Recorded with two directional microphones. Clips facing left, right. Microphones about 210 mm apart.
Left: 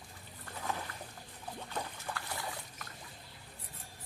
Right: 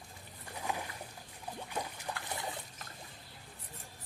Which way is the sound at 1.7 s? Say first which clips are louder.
Right 1 dB; 15° right (ahead or behind).